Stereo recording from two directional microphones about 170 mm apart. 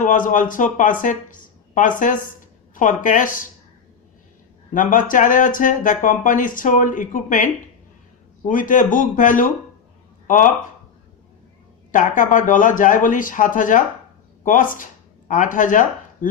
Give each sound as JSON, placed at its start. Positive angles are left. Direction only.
{"t": 0.0, "sound": "speech", "side_deg": 50}
{"t": 4.7, "sound": "speech", "side_deg": 50}
{"t": 11.9, "sound": "speech", "side_deg": 50}